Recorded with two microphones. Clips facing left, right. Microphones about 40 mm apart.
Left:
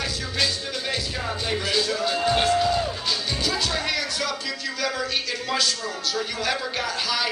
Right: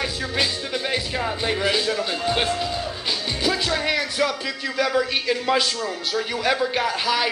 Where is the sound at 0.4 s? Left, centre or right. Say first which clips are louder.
Right 2 dB; right.